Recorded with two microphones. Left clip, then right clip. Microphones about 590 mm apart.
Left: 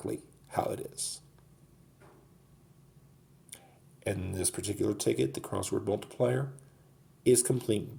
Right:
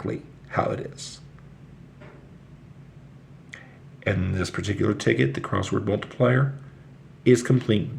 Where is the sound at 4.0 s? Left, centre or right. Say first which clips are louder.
Right 7 dB; left.